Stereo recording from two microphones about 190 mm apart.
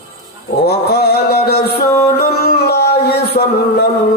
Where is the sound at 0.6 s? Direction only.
55° left (ahead or behind).